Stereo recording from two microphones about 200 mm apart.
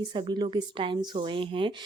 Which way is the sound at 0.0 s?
20° right (ahead or behind).